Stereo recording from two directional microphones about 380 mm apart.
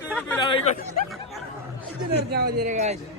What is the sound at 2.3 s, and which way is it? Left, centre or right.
Speech, right.